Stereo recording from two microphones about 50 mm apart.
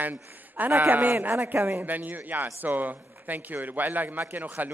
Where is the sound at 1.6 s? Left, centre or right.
Right.